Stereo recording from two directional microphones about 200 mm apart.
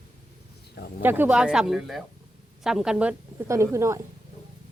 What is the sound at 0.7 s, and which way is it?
Speech, 55° left (ahead or behind).